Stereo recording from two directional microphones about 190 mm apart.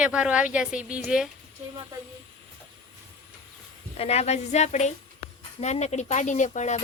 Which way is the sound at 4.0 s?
35° left (ahead or behind).